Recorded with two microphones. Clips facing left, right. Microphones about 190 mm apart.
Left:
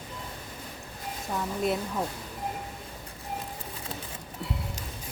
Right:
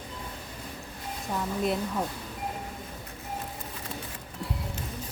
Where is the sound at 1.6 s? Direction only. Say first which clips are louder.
Left 1 dB; centre (ahead or behind).